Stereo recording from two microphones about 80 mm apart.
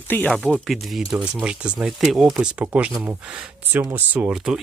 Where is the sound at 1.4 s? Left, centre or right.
Centre.